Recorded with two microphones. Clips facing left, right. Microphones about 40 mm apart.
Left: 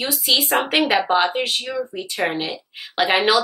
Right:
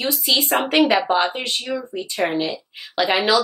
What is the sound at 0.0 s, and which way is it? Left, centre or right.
Speech, left.